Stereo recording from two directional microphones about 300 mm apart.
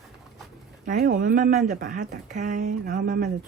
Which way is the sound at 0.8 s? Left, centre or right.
Right.